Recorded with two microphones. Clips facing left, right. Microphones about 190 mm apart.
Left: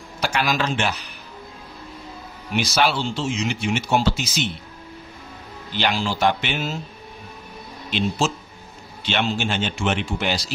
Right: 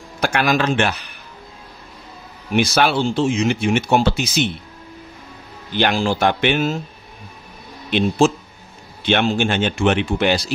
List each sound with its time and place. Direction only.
0.2 s speech: 55° right (ahead or behind)
2.5 s speech: 55° right (ahead or behind)
5.7 s speech: 50° right (ahead or behind)
7.9 s speech: 55° right (ahead or behind)